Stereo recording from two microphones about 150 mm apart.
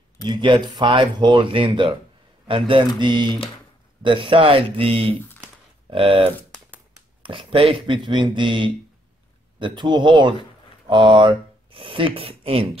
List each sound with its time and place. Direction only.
0.3 s speech: 30° right (ahead or behind)